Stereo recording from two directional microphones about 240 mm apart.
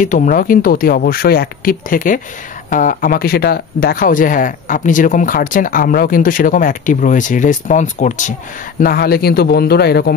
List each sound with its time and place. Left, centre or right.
0.0 s speech: left